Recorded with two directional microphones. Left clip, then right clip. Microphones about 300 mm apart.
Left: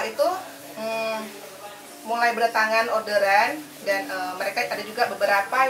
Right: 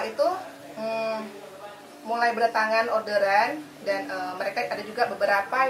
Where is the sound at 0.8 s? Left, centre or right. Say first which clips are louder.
Left 1 dB; centre.